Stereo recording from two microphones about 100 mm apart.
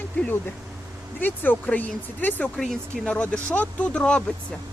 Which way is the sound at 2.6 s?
5° left (ahead or behind).